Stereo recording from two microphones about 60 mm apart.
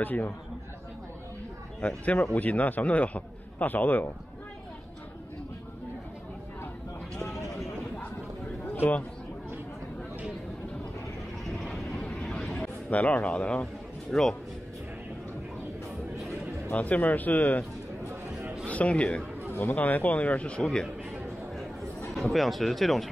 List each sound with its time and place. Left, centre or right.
0.0 s a man's voice: left
1.8 s a man's voice: left
8.6 s chatter: left
11.4 s vehicle: centre
12.0 s vehicle: centre
12.9 s a man's voice: left
16.7 s a man's voice: left
18.7 s a man's voice: left
19.5 s a man's voice: left
22.1 s speech: centre